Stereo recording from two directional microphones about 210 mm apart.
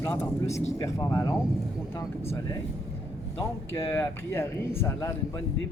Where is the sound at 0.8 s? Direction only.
15° left (ahead or behind).